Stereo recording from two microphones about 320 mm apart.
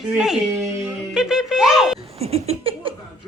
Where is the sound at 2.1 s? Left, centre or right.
Centre.